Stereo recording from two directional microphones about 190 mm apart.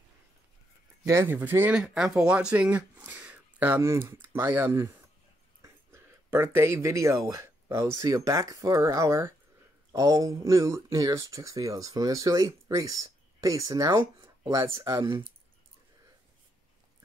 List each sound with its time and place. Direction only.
1.0 s speech: 15° right (ahead or behind)
5.6 s a sound: 15° right (ahead or behind)
7.2 s speech: 15° right (ahead or behind)